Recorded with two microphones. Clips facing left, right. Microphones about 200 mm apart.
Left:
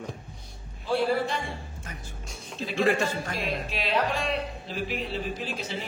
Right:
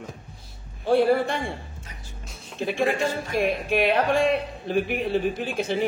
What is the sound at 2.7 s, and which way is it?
A man's voice, 55° right (ahead or behind).